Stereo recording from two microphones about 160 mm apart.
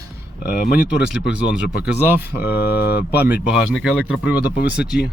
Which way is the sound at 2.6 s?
80° left.